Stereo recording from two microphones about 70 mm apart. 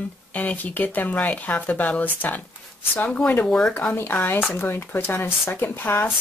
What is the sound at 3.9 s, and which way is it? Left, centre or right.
Speech, left.